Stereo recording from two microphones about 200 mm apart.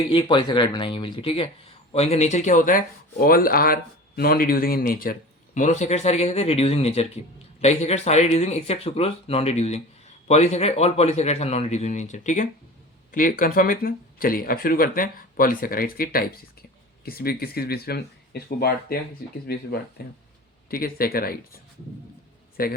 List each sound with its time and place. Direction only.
0.1 s speech: 25° left (ahead or behind); by 18.9 s 50° left (ahead or behind)
20.0 s speech: 55° left (ahead or behind)